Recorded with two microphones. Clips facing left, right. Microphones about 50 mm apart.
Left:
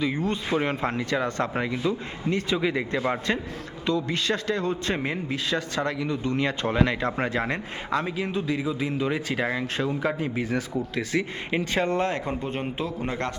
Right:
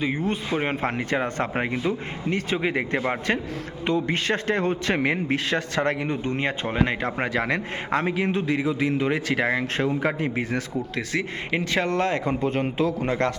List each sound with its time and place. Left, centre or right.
0.0 s speech: centre; by 4.8 s right
4.9 s speech: right
7.3 s a man's voice: right
7.9 s speech: right
12.1 s speech: right
12.5 s a man's voice: right